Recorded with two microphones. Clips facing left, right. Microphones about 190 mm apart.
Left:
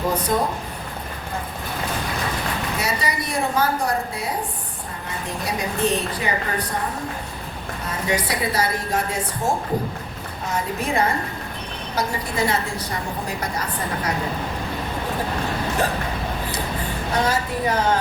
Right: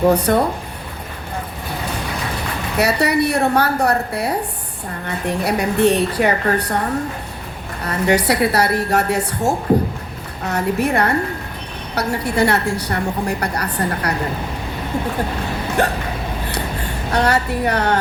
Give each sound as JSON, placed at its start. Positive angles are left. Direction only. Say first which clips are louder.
{"t": 0.0, "sound": "a woman's voice", "louder": "right 7 dB", "side_deg": -70}
{"t": 2.7, "sound": "a woman's voice", "louder": "right 13 dB", "side_deg": -65}
{"t": 7.9, "sound": "a woman's voice", "louder": "right 8 dB", "side_deg": -70}
{"t": 15.8, "sound": "a woman's voice", "louder": "right 5 dB", "side_deg": -70}
{"t": 17.1, "sound": "a woman's voice", "louder": "right 5 dB", "side_deg": -65}